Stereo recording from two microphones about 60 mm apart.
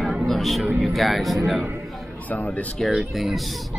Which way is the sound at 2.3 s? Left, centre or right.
Left.